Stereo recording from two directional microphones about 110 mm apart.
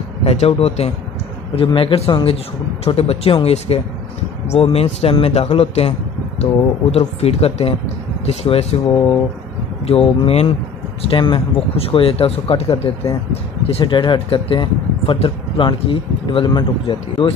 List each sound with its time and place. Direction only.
0.2 s speech: 70° left (ahead or behind)
1.7 s speech: 50° left (ahead or behind); by 4.8 s 70° left (ahead or behind)
4.8 s speech: 55° left (ahead or behind)
9.8 s speech: 65° left (ahead or behind)
11.0 s speech: 50° left (ahead or behind)
13.8 s speech: 45° left (ahead or behind)